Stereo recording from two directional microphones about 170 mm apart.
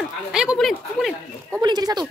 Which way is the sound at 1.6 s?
25° right (ahead or behind).